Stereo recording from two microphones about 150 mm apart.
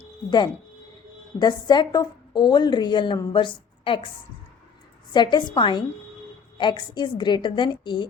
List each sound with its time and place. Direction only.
0.3 s a woman's voice: 30° left (ahead or behind)
5.1 s a woman's voice: 30° left (ahead or behind)